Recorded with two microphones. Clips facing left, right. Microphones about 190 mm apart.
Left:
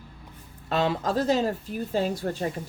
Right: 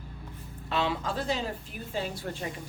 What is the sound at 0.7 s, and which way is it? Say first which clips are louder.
Speech: left 5 dB; 45° left (ahead or behind).